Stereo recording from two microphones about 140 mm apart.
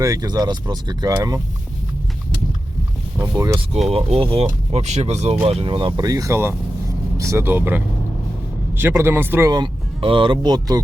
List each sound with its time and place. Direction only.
0.0 s speech: 25° right (ahead or behind)
3.2 s speech: 25° right (ahead or behind)
3.8 s speech: 45° right (ahead or behind)
4.7 s speech: 55° right (ahead or behind); by 5.9 s 40° right (ahead or behind)
6.0 s speech: 25° right (ahead or behind)
9.5 s speech: 35° right (ahead or behind)